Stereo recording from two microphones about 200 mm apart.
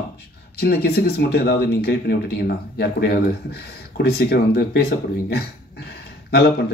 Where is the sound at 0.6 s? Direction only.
50° left (ahead or behind).